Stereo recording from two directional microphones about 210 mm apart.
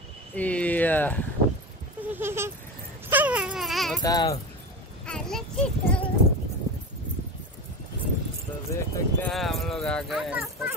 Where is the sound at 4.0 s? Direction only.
15° left (ahead or behind).